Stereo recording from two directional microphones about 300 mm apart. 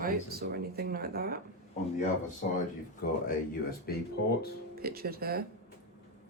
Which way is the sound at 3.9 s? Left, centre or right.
Left.